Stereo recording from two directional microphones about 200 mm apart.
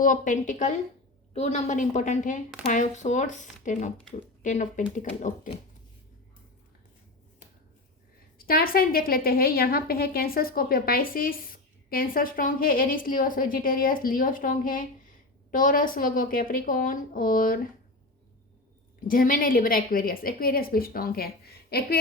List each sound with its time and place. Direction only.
0.0 s speech: 40° left (ahead or behind)
8.4 s a woman's voice: 50° left (ahead or behind)
19.0 s a woman's voice: 45° left (ahead or behind)